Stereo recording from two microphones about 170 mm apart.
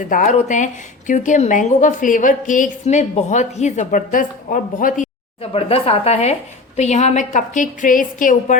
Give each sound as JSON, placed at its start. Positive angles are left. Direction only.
{"t": 0.0, "sound": "a woman's voice", "side_deg": 50}
{"t": 5.4, "sound": "a woman's voice", "side_deg": 35}